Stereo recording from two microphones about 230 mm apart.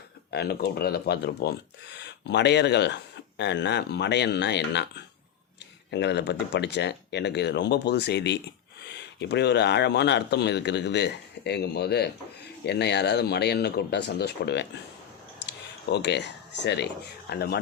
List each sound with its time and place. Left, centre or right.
0.3 s speech: left